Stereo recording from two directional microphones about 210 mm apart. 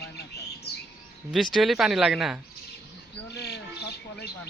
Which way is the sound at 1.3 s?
Centre (ahead or behind).